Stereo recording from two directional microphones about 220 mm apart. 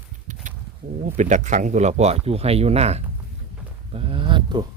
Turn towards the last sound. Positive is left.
turn(degrees=-20)  # may be behind; listen again after turning